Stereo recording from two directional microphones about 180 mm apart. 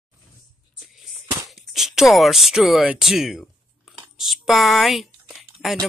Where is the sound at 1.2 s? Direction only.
15° right (ahead or behind).